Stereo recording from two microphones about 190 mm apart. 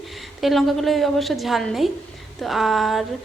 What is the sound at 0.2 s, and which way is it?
A woman's voice, centre (ahead or behind).